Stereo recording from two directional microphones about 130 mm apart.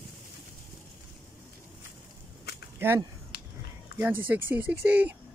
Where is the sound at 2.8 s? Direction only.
15° right (ahead or behind).